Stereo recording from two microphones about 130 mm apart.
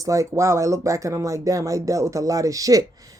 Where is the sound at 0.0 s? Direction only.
25° right (ahead or behind).